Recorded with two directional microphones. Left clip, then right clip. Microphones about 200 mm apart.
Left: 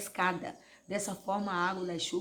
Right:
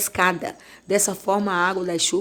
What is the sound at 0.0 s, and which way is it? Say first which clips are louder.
A woman's voice: right 11 dB; 45° right (ahead or behind).